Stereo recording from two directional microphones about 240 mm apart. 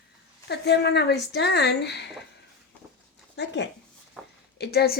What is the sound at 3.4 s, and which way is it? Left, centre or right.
Speech, left.